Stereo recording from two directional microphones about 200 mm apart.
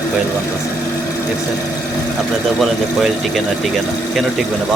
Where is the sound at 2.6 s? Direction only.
Centre (ahead or behind).